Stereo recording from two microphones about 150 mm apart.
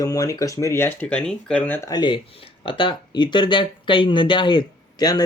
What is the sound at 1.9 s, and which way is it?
Speech, 30° left (ahead or behind).